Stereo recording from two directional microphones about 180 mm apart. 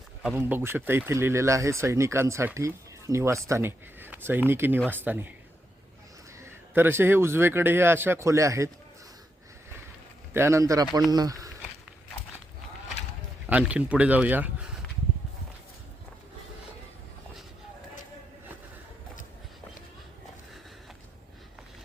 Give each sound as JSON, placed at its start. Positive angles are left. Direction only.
{"t": 0.2, "sound": "speech", "side_deg": -5}
{"t": 6.4, "sound": "speech", "side_deg": -10}
{"t": 10.3, "sound": "speech", "side_deg": -15}
{"t": 13.5, "sound": "speech", "side_deg": -5}